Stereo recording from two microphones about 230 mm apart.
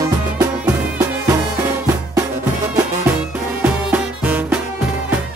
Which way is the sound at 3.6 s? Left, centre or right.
Centre.